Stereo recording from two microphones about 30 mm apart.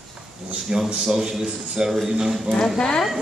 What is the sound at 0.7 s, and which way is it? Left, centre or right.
A man's voice, right.